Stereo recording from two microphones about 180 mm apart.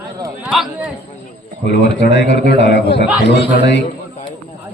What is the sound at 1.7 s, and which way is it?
A man's voice, 65° left (ahead or behind).